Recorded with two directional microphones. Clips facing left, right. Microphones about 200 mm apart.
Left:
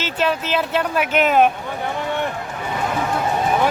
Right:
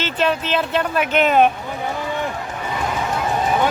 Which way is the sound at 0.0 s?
10° left (ahead or behind).